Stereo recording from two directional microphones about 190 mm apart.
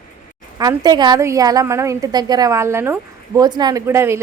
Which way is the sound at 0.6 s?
20° right (ahead or behind).